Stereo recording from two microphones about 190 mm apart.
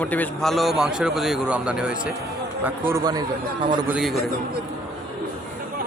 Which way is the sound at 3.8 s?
5° right (ahead or behind).